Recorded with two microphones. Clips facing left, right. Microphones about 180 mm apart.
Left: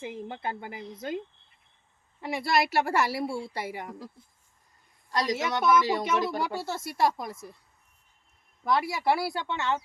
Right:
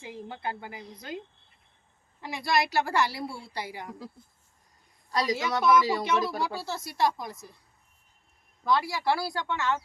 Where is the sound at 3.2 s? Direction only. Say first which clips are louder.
Left 6 dB; 25° left (ahead or behind).